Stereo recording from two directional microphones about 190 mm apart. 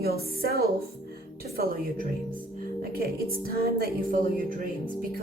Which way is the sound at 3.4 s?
55° right (ahead or behind).